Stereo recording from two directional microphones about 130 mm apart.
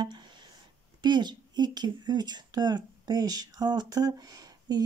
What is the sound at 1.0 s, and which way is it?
Speech, 35° right (ahead or behind).